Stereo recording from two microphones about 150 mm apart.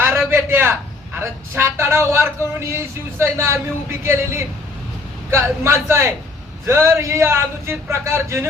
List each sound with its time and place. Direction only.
0.3 s a man's voice: 15° right (ahead or behind)